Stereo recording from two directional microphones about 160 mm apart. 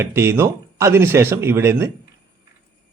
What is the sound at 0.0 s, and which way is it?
A man's voice, 15° right (ahead or behind).